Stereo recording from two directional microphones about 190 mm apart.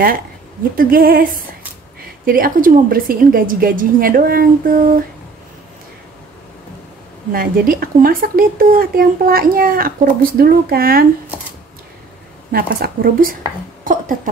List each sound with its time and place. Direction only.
0.7 s speech: 50° right (ahead or behind)
7.3 s speech: 50° right (ahead or behind)
12.5 s speech: 55° right (ahead or behind)
13.8 s a sound: 45° right (ahead or behind)